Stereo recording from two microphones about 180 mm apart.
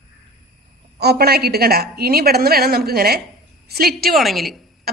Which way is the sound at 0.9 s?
60° right (ahead or behind).